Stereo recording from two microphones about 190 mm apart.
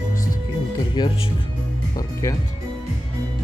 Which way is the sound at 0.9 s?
25° left (ahead or behind).